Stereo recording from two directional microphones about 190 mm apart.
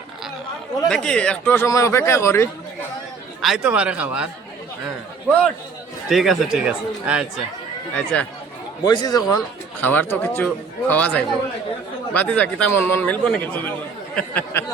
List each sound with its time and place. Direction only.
0.9 s speech: 5° left (ahead or behind)
3.4 s speech: 5° right (ahead or behind)
6.1 s speech: centre (ahead or behind)
7.9 s speech: 5° left (ahead or behind)
8.8 s speech: 20° left (ahead or behind)
9.8 s speech: 10° left (ahead or behind)